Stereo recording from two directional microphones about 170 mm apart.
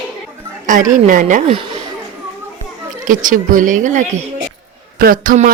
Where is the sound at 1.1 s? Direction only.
50° right (ahead or behind).